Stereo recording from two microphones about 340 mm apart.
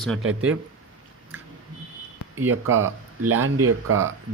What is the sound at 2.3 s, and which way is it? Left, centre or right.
Speech, right.